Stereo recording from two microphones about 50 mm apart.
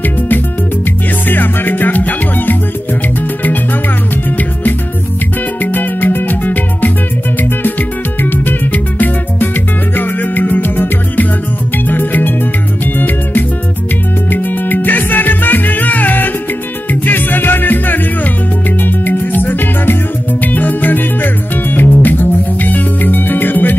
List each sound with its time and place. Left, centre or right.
1.2 s music: left
5.6 s music: left
8.2 s music: left